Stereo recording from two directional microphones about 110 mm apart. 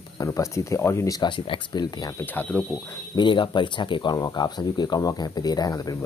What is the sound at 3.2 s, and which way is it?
Speech, 45° left (ahead or behind).